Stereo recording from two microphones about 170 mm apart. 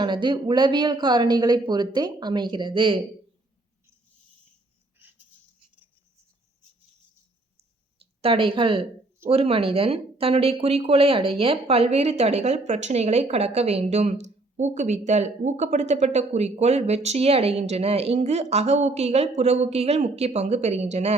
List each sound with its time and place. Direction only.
0.0 s speech: 25° right (ahead or behind)
8.2 s speech: 30° right (ahead or behind)